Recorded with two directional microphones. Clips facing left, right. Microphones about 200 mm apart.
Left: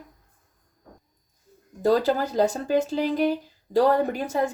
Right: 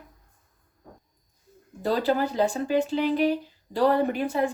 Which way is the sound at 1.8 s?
40° left (ahead or behind).